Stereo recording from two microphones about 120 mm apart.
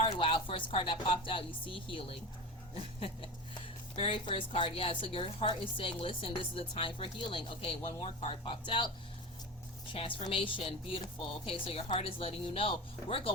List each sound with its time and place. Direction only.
0.0 s speech: 50° left (ahead or behind)
3.9 s a woman's voice: 50° left (ahead or behind)
9.9 s a woman's voice: 50° left (ahead or behind)